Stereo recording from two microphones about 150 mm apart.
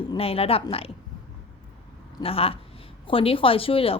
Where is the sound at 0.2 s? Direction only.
40° left (ahead or behind).